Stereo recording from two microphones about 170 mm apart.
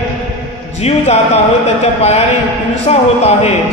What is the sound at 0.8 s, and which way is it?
A man's voice, 40° left (ahead or behind).